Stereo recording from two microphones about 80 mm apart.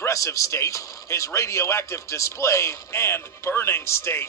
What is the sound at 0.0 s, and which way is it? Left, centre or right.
A man's voice, left.